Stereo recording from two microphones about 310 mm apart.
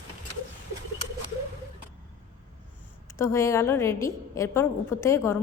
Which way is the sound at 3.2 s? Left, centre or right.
Centre.